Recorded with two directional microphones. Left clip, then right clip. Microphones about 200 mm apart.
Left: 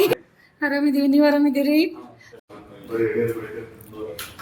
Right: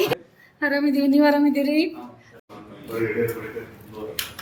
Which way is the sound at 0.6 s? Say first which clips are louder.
Even; 10° left (ahead or behind).